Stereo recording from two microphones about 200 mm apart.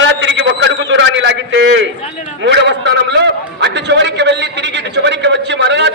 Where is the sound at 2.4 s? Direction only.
60° right (ahead or behind).